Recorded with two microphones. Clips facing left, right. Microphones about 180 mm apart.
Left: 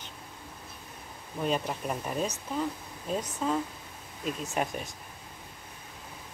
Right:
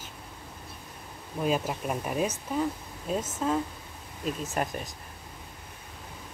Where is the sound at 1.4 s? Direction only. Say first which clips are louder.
Right 2 dB; 5° right (ahead or behind).